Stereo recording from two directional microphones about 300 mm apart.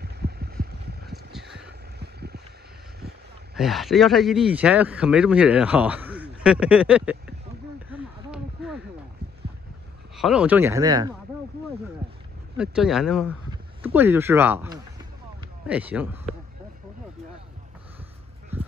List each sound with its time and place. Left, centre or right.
0.0 s vehicle: right
1.3 s vehicle: centre
2.0 s boat: right
3.5 s speech: centre
7.9 s a sound: centre
10.1 s speech: centre
12.5 s speech: centre